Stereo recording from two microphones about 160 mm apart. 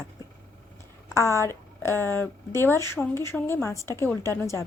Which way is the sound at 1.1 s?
20° left (ahead or behind).